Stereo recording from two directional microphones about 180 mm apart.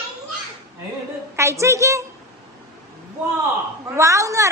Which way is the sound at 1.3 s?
15° right (ahead or behind).